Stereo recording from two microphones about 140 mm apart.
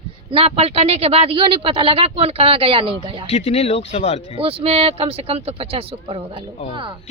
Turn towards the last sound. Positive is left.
turn(degrees=-40)  # may be behind; listen again after turning